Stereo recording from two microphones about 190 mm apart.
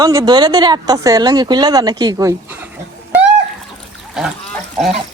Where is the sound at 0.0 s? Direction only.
20° right (ahead or behind).